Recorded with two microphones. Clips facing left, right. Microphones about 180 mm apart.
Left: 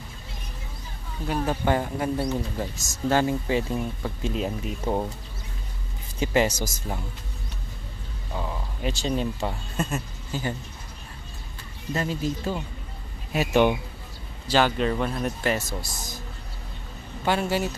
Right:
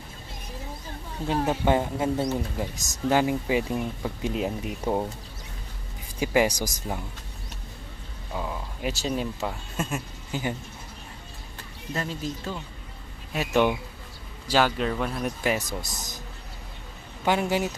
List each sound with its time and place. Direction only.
1.2 s speech: 20° right (ahead or behind)
6.1 s speech: 10° right (ahead or behind)
8.3 s speech: 5° right (ahead or behind)
11.9 s speech: 5° left (ahead or behind)
15.8 s speech: 20° right (ahead or behind)
17.2 s speech: 15° right (ahead or behind)